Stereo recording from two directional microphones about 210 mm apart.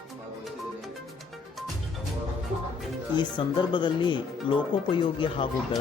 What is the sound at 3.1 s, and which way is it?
Speech, 20° left (ahead or behind).